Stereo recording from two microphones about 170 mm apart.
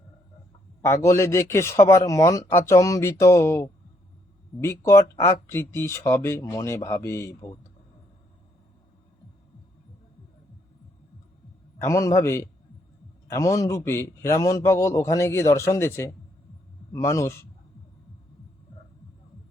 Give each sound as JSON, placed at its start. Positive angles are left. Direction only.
{"t": 0.8, "sound": "a man's voice", "side_deg": 15}
{"t": 11.9, "sound": "a man's voice", "side_deg": 15}